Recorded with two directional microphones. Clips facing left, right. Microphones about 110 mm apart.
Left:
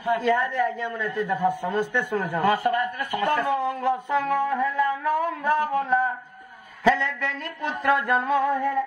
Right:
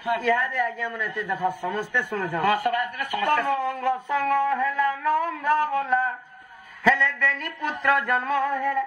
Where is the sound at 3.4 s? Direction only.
15° left (ahead or behind).